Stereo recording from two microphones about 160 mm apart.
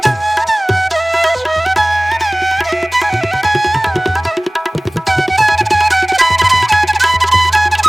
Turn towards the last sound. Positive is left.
turn(degrees=0)  # may be behind; listen again after turning